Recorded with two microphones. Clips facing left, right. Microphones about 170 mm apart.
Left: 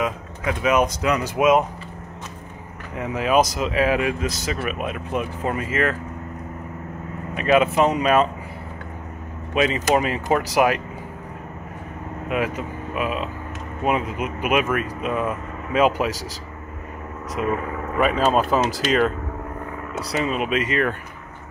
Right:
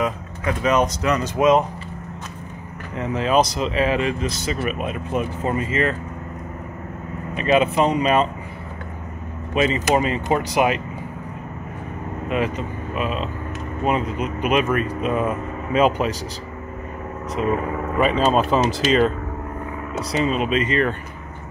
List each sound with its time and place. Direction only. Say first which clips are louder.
0.0 s speech: right 1 dB; 5° left (ahead or behind)
3.0 s speech: even; 10° left (ahead or behind)
7.3 s speech: even; 5° left (ahead or behind)
9.5 s speech: even; centre (ahead or behind)
12.3 s speech: right 1 dB; 5° left (ahead or behind)
17.9 s speech: right 1 dB; 5° left (ahead or behind)